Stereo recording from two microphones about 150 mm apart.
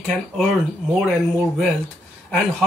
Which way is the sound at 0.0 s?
Centre (ahead or behind).